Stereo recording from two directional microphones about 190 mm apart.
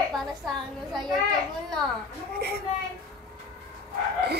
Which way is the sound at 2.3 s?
55° right (ahead or behind).